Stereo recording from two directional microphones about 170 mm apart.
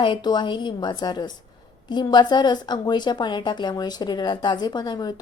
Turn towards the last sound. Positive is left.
turn(degrees=25)  # may be behind; listen again after turning